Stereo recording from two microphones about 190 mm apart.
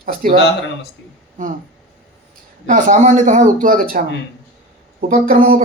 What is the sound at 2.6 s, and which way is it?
Speech, 45° right (ahead or behind).